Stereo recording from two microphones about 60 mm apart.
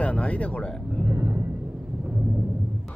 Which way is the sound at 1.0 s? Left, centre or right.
Right.